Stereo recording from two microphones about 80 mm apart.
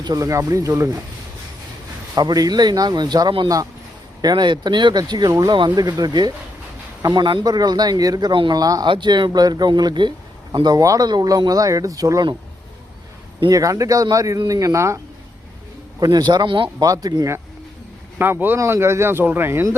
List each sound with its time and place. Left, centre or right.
0.2 s speech: right
2.1 s a man's voice: right
4.2 s a man's voice: right
7.0 s speech: right
7.3 s a man's voice: right
8.3 s speech: right
8.5 s speech: right
8.9 s a man's voice: right
13.5 s speech: right
16.0 s a man's voice: right
16.8 s speech: right
18.2 s speech: right